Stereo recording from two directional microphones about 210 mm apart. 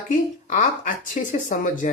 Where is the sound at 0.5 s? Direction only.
40° left (ahead or behind).